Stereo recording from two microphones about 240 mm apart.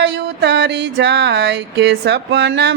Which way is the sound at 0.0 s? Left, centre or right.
Right.